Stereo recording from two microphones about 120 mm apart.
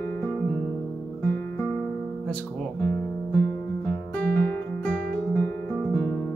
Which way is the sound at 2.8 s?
20° left (ahead or behind).